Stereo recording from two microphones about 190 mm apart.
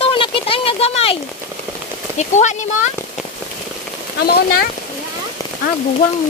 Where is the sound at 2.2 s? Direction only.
40° left (ahead or behind).